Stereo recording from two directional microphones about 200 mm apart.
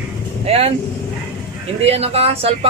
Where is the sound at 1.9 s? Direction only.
30° right (ahead or behind).